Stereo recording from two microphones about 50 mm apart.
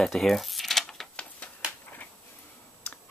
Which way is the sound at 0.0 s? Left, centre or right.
Centre.